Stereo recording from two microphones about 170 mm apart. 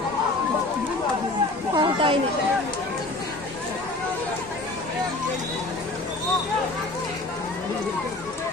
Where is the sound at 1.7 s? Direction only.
30° right (ahead or behind).